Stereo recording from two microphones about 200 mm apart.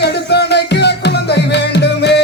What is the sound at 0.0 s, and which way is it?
Music, 55° left (ahead or behind).